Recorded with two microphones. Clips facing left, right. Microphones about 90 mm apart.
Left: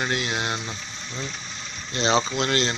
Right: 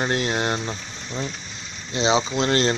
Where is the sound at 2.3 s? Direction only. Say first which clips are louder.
Right 3 dB; 35° right (ahead or behind).